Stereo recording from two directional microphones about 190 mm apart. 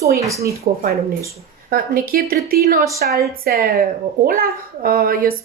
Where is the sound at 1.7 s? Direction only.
50° right (ahead or behind).